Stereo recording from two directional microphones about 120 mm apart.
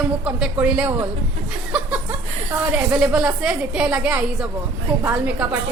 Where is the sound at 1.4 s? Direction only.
5° right (ahead or behind).